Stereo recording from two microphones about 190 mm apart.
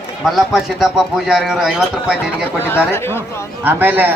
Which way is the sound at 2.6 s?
10° left (ahead or behind).